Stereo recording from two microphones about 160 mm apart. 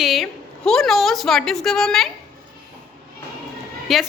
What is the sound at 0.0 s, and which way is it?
A woman's voice, centre (ahead or behind).